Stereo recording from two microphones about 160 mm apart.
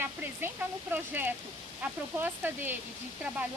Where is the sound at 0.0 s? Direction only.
10° right (ahead or behind).